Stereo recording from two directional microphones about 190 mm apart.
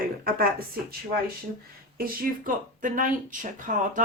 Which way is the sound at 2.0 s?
45° right (ahead or behind).